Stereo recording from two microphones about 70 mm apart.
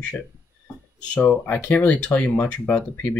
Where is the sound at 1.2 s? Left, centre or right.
Left.